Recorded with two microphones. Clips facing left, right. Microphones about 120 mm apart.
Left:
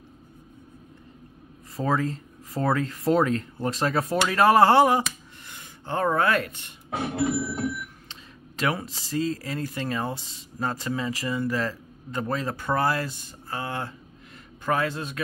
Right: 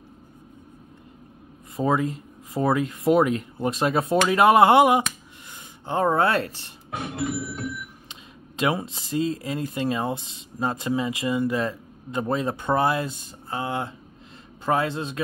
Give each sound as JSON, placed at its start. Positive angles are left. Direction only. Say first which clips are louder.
{"t": 1.8, "sound": "speech", "louder": "right 2 dB", "side_deg": -15}
{"t": 7.0, "sound": "a sound", "louder": "left 3 dB", "side_deg": 30}
{"t": 8.1, "sound": "speech", "louder": "right 1 dB", "side_deg": -20}